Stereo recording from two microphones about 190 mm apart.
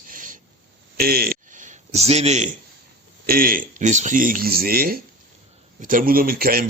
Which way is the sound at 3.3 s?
50° right (ahead or behind).